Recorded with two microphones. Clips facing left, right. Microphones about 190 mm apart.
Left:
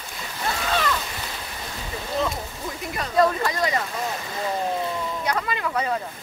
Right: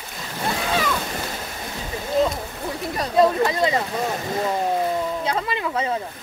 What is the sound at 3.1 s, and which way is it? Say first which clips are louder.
Speech: right 3 dB; 20° right (ahead or behind).